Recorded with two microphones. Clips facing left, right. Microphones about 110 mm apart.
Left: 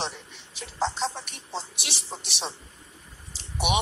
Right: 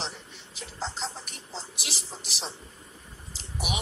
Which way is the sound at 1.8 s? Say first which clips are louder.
Left 2 dB; 70° left (ahead or behind).